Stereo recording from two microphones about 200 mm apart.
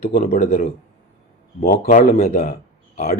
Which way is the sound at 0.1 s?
40° left (ahead or behind).